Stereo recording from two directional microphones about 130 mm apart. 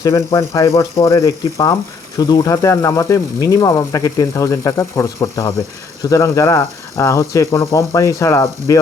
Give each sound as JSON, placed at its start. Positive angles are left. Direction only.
{"t": 0.3, "sound": "speech", "side_deg": 25}